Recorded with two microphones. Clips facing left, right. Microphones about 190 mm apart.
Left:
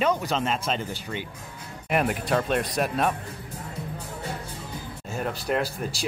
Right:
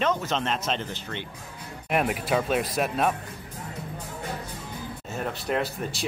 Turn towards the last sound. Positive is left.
turn(degrees=0)  # may be behind; listen again after turning